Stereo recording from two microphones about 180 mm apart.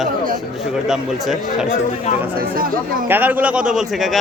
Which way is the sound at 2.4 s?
55° right (ahead or behind).